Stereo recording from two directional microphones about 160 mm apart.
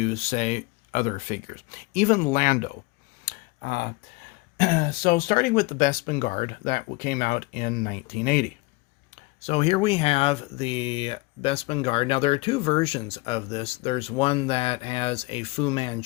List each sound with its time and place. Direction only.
0.0 s speech: 45° left (ahead or behind)
3.2 s clicking: 75° left (ahead or behind)
4.5 s speech: 75° left (ahead or behind)
9.5 s speech: 40° left (ahead or behind)